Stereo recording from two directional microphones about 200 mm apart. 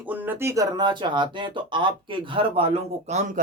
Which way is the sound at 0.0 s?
10° right (ahead or behind).